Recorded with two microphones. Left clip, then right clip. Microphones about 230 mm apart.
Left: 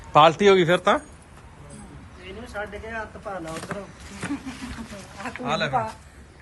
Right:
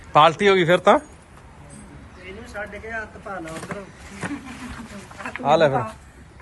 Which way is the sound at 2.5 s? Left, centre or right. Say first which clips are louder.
Right 1 dB; left.